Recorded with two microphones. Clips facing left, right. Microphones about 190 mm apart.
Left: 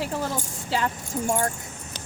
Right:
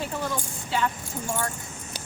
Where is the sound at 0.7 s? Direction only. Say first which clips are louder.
Left 1 dB; 35° left (ahead or behind).